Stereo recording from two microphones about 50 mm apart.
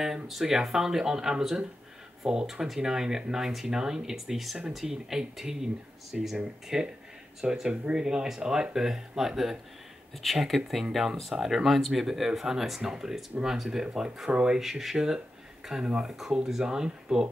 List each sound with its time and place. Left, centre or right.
0.0 s speech: centre
14.6 s speech: centre